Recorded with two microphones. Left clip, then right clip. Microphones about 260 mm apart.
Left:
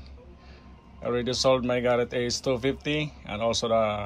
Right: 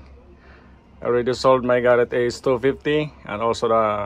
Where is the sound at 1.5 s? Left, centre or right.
Right.